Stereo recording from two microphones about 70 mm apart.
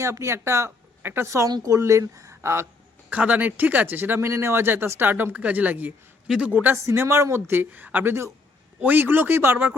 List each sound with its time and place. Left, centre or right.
0.0 s speech: right
1.0 s speech: right
1.6 s speech: right
3.1 s speech: centre
6.8 s speech: right